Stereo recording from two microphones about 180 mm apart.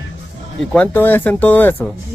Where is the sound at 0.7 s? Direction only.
10° left (ahead or behind).